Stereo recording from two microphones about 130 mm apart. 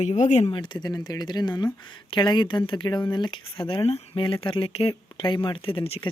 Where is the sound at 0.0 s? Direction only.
65° left (ahead or behind).